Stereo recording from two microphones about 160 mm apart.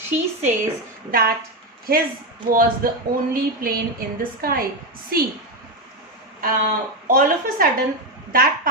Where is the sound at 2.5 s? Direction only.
65° right (ahead or behind).